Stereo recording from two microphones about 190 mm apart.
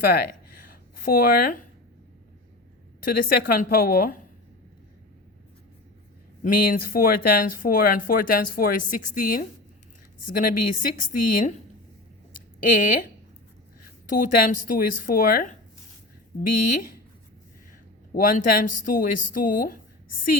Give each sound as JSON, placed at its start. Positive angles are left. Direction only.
{"t": 0.1, "sound": "a sound", "side_deg": 55}
{"t": 3.0, "sound": "speech", "side_deg": 50}
{"t": 6.4, "sound": "speech", "side_deg": 50}
{"t": 12.6, "sound": "speech", "side_deg": 45}
{"t": 14.2, "sound": "speech", "side_deg": 45}
{"t": 18.1, "sound": "speech", "side_deg": 50}